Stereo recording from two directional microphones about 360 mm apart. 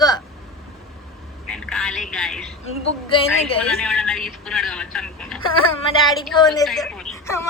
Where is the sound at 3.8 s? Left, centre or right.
Centre.